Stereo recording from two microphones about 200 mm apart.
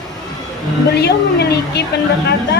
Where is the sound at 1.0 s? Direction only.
55° left (ahead or behind).